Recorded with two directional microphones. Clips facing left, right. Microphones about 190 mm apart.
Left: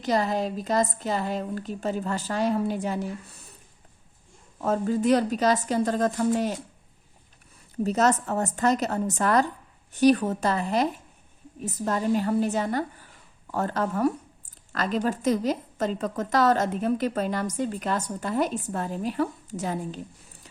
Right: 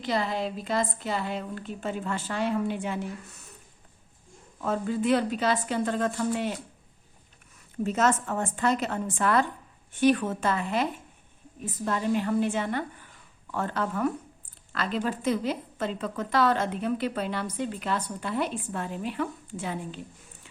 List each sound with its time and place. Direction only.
0.0 s a woman's voice: 45° left (ahead or behind)
4.6 s a woman's voice: 40° left (ahead or behind)
7.9 s a woman's voice: 40° left (ahead or behind)